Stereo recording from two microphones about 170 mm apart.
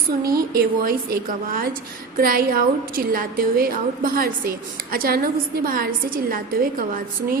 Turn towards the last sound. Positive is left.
turn(degrees=-55)  # may be behind; listen again after turning